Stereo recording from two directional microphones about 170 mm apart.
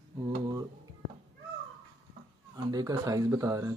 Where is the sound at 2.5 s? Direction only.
25° right (ahead or behind).